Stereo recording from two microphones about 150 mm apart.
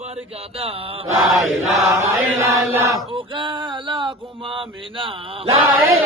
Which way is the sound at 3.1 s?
35° right (ahead or behind).